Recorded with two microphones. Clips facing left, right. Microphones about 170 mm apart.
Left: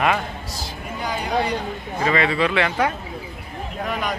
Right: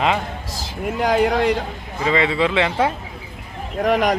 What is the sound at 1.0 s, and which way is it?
Speech, 90° right.